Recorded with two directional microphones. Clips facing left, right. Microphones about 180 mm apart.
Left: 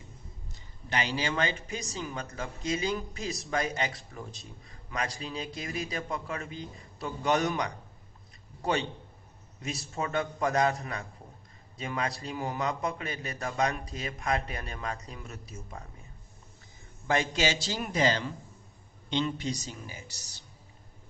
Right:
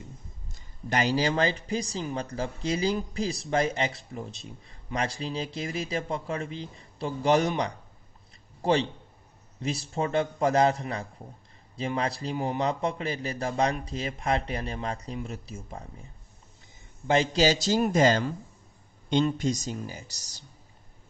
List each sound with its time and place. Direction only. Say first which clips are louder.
0.9 s speech: right 6 dB; 40° right (ahead or behind)
17.1 s a man's voice: right 5 dB; 30° right (ahead or behind)